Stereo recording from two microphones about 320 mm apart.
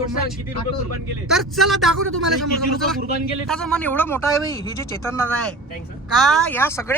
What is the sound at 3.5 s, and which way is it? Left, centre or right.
Speech, centre.